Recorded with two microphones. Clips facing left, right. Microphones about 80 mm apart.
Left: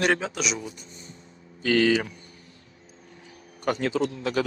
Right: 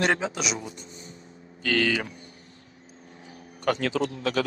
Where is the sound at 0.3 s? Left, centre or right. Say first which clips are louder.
Left 1 dB; right.